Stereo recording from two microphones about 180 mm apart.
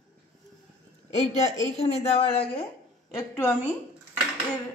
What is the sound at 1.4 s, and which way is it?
A woman's voice, 35° left (ahead or behind).